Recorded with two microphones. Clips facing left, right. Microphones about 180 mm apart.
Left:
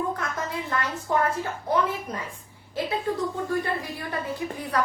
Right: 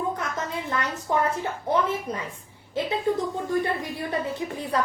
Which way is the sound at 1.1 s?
20° right (ahead or behind).